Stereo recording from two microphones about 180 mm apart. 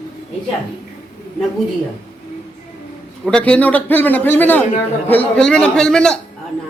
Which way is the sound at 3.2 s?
5° left (ahead or behind).